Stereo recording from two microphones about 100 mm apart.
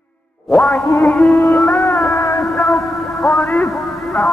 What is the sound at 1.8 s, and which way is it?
Music, 20° left (ahead or behind).